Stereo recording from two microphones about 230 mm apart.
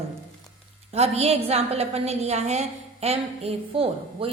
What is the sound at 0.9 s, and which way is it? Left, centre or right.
A woman's voice, right.